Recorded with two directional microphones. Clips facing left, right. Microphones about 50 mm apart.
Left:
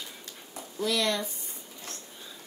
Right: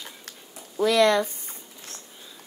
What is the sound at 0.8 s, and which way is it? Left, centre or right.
Speech, right.